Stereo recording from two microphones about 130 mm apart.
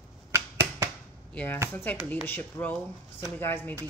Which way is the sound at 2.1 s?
15° left (ahead or behind).